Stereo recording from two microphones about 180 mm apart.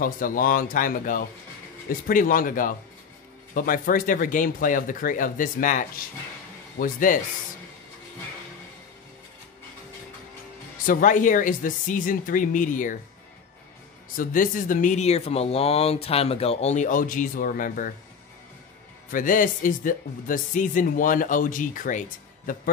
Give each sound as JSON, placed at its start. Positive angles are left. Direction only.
{"t": 0.0, "sound": "speech", "side_deg": 50}
{"t": 10.9, "sound": "speech", "side_deg": 50}
{"t": 14.1, "sound": "speech", "side_deg": 50}
{"t": 19.1, "sound": "speech", "side_deg": 50}